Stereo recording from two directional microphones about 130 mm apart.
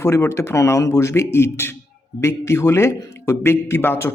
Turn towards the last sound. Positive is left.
turn(degrees=15)  # may be behind; listen again after turning